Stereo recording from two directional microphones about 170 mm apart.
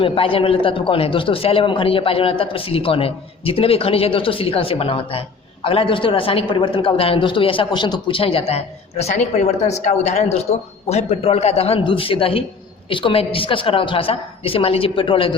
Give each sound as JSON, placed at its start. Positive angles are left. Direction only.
{"t": 0.0, "sound": "a woman's voice", "side_deg": 30}